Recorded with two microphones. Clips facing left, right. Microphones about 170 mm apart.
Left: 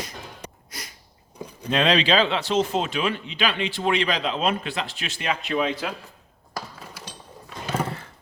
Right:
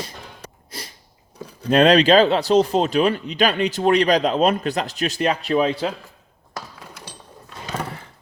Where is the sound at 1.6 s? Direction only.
45° right (ahead or behind).